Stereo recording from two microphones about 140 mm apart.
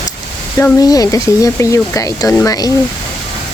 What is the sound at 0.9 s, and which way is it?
Speech, 25° left (ahead or behind).